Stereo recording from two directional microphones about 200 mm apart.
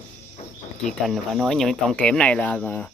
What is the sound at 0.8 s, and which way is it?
Speech, centre (ahead or behind).